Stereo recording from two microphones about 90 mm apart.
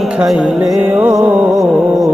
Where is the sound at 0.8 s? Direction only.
25° right (ahead or behind).